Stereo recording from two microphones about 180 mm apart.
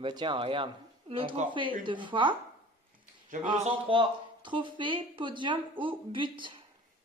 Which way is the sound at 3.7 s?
30° right (ahead or behind).